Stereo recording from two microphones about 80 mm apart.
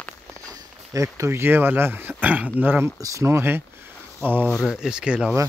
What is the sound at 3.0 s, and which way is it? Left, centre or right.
Speech, right.